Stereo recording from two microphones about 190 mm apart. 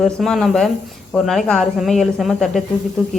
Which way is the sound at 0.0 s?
Centre (ahead or behind).